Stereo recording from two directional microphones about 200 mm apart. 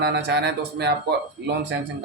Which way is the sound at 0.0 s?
55° right (ahead or behind).